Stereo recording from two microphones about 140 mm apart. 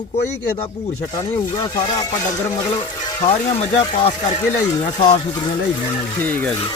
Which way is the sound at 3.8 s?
40° left (ahead or behind).